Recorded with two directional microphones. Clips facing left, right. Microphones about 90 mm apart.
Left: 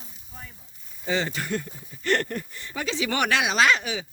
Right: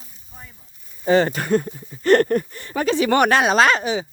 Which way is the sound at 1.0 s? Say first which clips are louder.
Right 10 dB; 45° right (ahead or behind).